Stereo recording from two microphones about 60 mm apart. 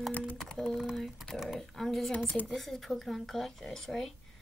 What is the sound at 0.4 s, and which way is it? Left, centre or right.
Music, centre.